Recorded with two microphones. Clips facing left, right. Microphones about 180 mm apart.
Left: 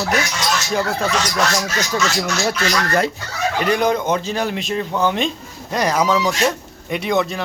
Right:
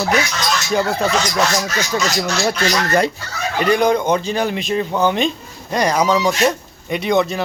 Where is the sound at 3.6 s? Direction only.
Centre (ahead or behind).